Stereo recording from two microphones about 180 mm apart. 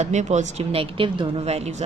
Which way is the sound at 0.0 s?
40° right (ahead or behind).